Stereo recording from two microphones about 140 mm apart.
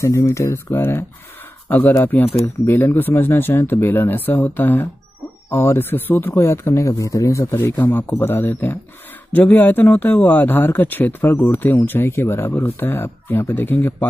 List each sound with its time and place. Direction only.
0.0 s speech: 20° left (ahead or behind)